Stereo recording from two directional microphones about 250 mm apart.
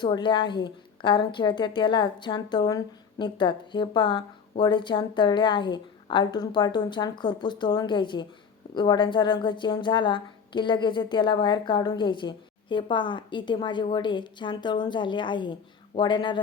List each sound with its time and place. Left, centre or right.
0.0 s a woman's voice: centre